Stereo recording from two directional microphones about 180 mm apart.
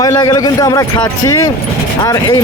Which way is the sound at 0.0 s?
20° left (ahead or behind).